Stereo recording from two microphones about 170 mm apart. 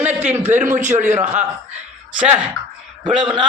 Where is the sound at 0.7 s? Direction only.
45° right (ahead or behind).